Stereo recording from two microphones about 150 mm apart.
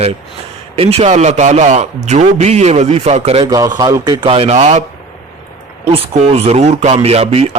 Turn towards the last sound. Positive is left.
turn(degrees=-45)  # may be behind; listen again after turning